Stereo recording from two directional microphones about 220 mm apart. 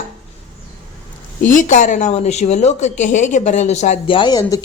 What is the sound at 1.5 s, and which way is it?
A woman's voice, 35° left (ahead or behind).